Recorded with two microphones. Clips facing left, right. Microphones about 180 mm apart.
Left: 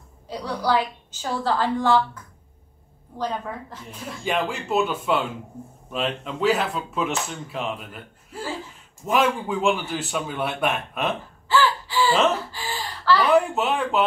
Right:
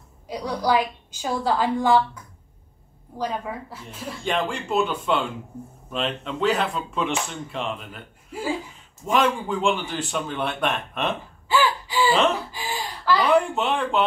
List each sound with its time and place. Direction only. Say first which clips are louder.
0.3 s a woman's voice: right 1 dB; 15° right (ahead or behind)
3.2 s a woman's voice: even; 10° right (ahead or behind)
4.2 s a man's voice: even; 5° left (ahead or behind)
8.3 s a sound: right 4 dB; 10° right (ahead or behind)
9.0 s a man's voice: even; 5° left (ahead or behind)
11.4 s gasp: left 1 dB; 15° right (ahead or behind)
13.3 s a man's voice: left 1 dB; centre (ahead or behind)